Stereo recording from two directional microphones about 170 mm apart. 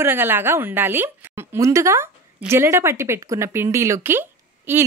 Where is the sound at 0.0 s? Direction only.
10° right (ahead or behind).